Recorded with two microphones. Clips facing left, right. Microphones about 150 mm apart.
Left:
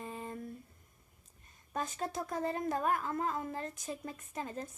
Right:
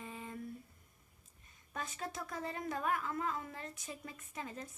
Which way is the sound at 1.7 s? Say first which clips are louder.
Left 6 dB; 40° left (ahead or behind).